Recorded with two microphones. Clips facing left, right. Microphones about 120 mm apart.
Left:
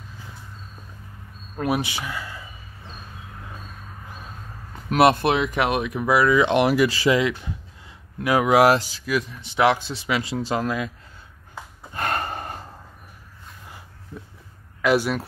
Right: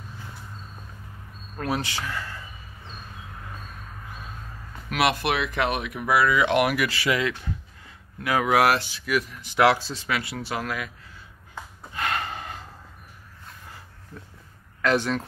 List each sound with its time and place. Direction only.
1.6 s a man's voice: 15° left (ahead or behind)
4.8 s speech: 35° left (ahead or behind)
5.2 s a man's voice: 20° left (ahead or behind)
11.9 s gasp: 45° left (ahead or behind)
14.8 s a man's voice: 10° left (ahead or behind)